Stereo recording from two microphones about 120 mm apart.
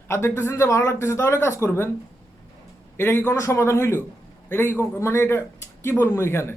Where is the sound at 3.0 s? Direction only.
20° left (ahead or behind).